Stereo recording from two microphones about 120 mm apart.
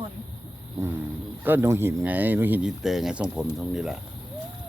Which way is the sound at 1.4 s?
20° right (ahead or behind).